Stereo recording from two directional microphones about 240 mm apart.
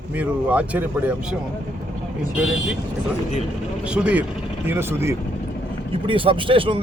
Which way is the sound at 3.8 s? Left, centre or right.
Centre.